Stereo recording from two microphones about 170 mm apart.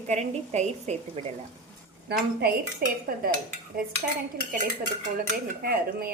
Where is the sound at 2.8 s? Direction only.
60° right (ahead or behind).